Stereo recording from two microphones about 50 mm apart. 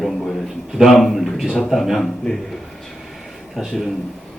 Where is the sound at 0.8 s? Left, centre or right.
Centre.